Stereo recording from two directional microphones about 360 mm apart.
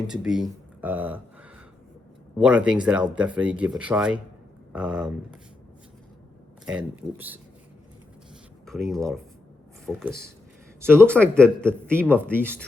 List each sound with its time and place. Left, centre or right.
0.1 s speech: centre
6.7 s speech: centre
8.6 s speech: centre